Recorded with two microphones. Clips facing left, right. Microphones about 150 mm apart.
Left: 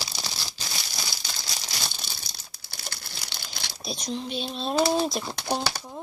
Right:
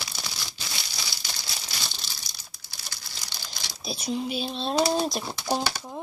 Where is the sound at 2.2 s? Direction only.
60° left (ahead or behind).